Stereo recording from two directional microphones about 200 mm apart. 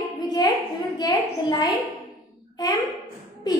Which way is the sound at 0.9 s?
20° left (ahead or behind).